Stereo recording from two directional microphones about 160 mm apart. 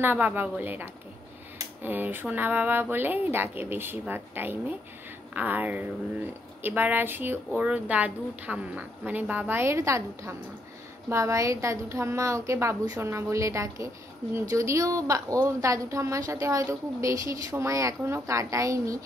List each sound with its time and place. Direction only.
0.0 s a woman's voice: 10° right (ahead or behind)